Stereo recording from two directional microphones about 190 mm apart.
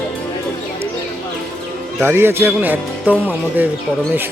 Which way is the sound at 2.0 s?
10° right (ahead or behind).